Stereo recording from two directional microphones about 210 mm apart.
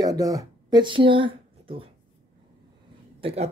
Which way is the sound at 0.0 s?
15° right (ahead or behind).